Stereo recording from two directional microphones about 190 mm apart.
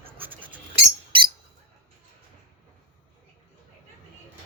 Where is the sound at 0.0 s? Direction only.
10° right (ahead or behind).